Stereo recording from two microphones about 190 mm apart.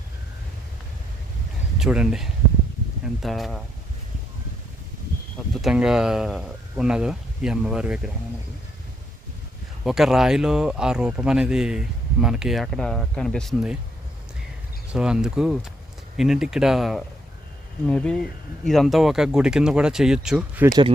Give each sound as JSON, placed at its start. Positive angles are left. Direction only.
{"t": 1.8, "sound": "speech", "side_deg": -5}
{"t": 5.6, "sound": "speech", "side_deg": -5}
{"t": 9.8, "sound": "speech", "side_deg": 0}
{"t": 14.9, "sound": "speech", "side_deg": -5}
{"t": 20.7, "sound": "speech", "side_deg": -20}